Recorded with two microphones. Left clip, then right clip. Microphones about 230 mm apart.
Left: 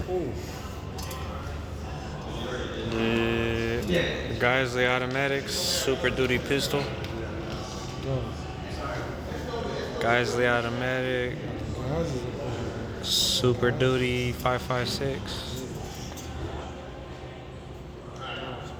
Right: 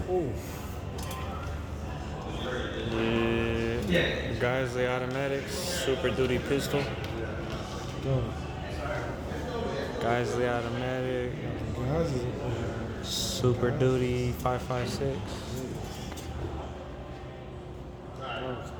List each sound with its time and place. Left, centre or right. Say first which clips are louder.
2.9 s mantra: left 2 dB; centre
4.4 s speech: left 7 dB; centre
10.0 s speech: left 5 dB; centre
11.9 s a man's voice: right 1 dB; right
13.1 s speech: left 6 dB; centre